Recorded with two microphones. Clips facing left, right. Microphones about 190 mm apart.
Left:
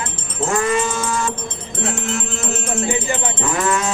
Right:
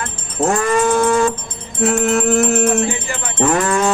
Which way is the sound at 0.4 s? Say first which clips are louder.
Right 4 dB; 60° right (ahead or behind).